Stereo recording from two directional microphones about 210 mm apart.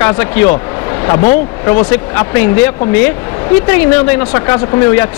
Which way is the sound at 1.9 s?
10° left (ahead or behind).